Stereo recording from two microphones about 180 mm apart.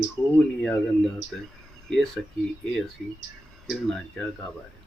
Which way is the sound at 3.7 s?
Centre (ahead or behind).